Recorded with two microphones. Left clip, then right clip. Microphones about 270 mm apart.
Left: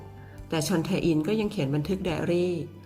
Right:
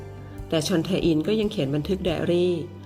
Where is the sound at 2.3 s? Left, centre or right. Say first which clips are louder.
Right 5 dB; centre.